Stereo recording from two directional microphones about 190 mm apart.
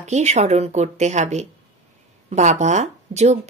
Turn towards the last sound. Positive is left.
turn(degrees=-35)  # may be behind; listen again after turning